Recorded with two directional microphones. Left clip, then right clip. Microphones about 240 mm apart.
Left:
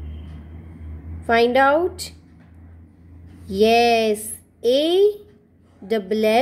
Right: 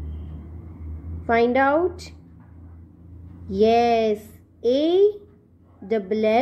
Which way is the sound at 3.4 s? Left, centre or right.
Centre.